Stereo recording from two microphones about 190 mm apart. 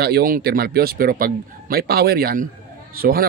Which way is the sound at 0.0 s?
50° right (ahead or behind).